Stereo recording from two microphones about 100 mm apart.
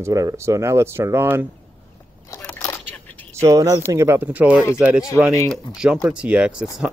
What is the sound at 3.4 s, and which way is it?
Speech, 35° right (ahead or behind).